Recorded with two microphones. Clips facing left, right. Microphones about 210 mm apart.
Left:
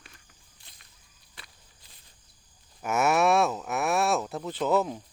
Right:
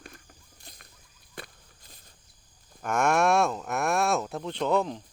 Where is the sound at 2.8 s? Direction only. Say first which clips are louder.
Even; 5° left (ahead or behind).